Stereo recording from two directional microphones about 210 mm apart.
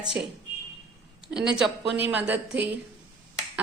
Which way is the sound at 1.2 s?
5° right (ahead or behind).